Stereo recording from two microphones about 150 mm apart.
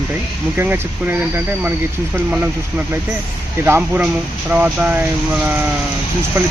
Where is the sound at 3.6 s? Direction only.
10° right (ahead or behind).